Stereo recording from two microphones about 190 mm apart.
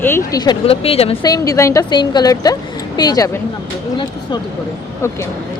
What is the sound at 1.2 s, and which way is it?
Speech, 20° left (ahead or behind).